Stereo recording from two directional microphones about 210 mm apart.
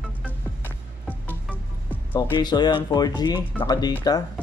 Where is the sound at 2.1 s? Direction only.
20° left (ahead or behind).